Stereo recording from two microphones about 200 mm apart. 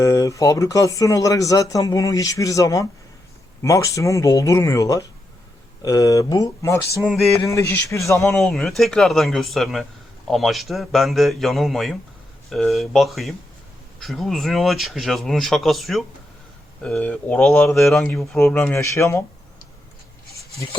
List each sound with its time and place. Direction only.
0.0 s speech: 15° left (ahead or behind)
8.4 s speech: centre (ahead or behind)